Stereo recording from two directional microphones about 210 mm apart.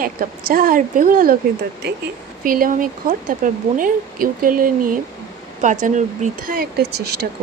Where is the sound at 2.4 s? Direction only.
40° right (ahead or behind).